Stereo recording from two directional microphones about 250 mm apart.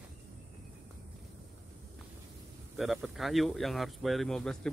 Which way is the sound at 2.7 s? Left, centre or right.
Centre.